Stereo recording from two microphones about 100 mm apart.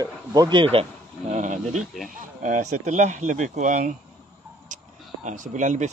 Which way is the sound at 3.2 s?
90° right.